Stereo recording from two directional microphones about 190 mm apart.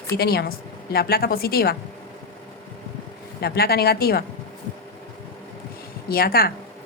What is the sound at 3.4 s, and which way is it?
Speech, 55° left (ahead or behind).